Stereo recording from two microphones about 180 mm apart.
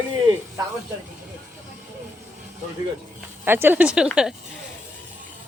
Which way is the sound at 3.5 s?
10° right (ahead or behind).